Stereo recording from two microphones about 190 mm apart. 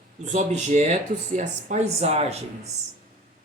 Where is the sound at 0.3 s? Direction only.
40° right (ahead or behind).